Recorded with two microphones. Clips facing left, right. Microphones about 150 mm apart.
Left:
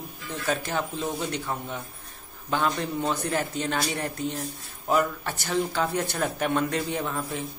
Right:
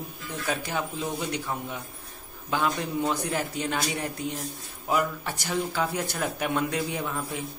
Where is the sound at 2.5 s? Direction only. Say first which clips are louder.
Left 1 dB; 10° right (ahead or behind).